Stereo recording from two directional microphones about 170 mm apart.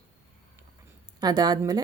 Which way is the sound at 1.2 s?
25° right (ahead or behind).